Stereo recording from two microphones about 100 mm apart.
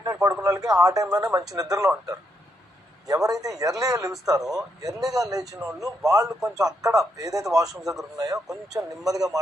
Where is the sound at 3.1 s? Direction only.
35° right (ahead or behind).